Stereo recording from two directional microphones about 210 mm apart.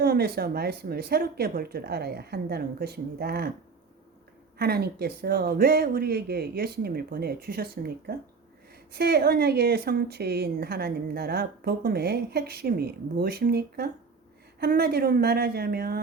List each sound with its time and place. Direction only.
0.0 s speech: 50° right (ahead or behind)
4.5 s speech: 50° right (ahead or behind)